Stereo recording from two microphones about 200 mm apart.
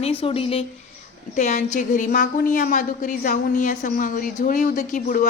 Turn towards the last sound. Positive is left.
turn(degrees=45)  # may be behind; listen again after turning